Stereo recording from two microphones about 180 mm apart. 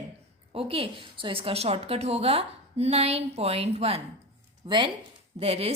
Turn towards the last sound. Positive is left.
turn(degrees=-35)  # may be behind; listen again after turning